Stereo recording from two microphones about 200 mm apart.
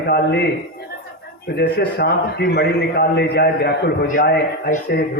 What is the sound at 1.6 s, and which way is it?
A man's voice, 55° left (ahead or behind).